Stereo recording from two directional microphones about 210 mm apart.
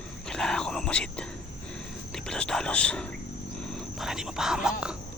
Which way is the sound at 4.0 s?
Centre (ahead or behind).